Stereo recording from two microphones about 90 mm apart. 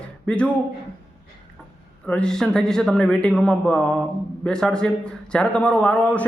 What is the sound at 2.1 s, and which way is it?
A man's voice, 10° left (ahead or behind).